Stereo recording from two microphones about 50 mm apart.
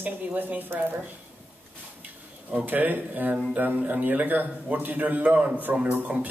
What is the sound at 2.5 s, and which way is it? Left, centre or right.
A woman's voice, right.